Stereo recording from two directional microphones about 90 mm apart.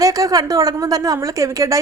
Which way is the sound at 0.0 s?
40° right (ahead or behind).